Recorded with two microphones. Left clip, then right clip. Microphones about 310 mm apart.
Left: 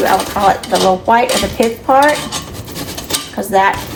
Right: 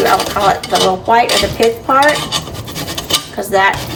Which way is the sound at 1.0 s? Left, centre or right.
Centre.